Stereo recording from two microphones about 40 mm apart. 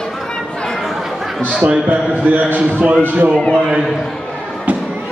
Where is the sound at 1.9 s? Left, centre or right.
Right.